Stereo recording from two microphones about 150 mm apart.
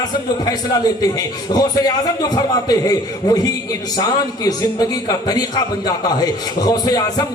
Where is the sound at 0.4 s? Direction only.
25° left (ahead or behind).